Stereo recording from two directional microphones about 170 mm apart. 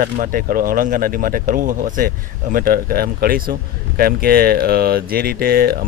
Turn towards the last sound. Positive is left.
turn(degrees=-60)  # may be behind; listen again after turning